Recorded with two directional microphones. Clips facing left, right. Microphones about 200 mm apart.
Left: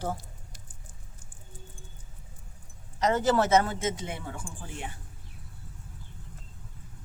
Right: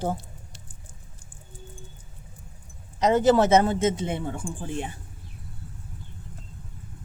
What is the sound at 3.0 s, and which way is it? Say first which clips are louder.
Speech: right 6 dB; 20° right (ahead or behind).